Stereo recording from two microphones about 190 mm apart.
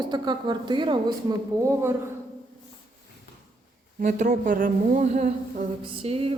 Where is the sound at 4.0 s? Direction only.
40° right (ahead or behind).